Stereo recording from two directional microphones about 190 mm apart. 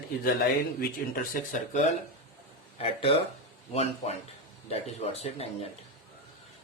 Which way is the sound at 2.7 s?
30° left (ahead or behind).